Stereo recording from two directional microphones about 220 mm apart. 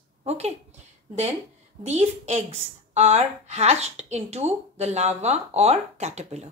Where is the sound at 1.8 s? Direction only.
30° right (ahead or behind).